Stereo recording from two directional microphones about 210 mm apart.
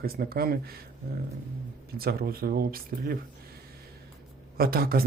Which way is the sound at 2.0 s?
45° right (ahead or behind).